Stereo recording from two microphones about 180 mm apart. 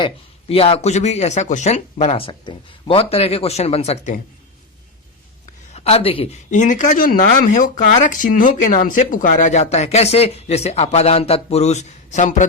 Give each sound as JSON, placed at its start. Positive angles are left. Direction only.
{"t": 0.0, "sound": "speech", "side_deg": 30}
{"t": 5.7, "sound": "speech", "side_deg": 35}